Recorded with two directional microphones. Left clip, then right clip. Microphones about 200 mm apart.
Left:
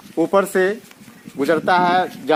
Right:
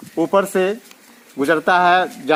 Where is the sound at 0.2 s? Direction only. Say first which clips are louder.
Even; 45° right (ahead or behind).